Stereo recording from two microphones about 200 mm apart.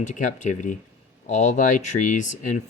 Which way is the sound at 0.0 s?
40° left (ahead or behind).